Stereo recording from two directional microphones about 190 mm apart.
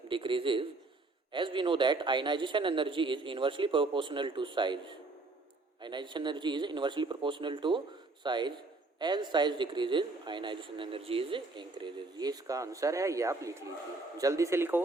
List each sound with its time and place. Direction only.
0.1 s speech: 25° right (ahead or behind)